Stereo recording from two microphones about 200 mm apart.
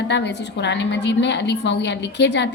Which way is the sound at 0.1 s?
60° left (ahead or behind).